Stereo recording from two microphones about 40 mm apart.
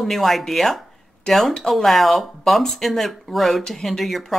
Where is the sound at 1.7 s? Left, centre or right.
Centre.